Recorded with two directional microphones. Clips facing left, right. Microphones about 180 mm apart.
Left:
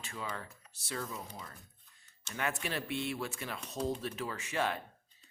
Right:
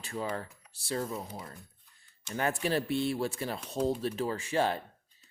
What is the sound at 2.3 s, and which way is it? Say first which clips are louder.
Speech: right 7 dB; 35° right (ahead or behind).